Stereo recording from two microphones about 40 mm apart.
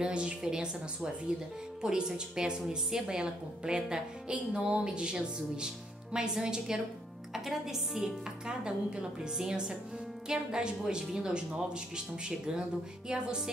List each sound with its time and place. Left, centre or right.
0.0 s a woman's voice: right
7.3 s speech: centre
8.5 s a woman's voice: right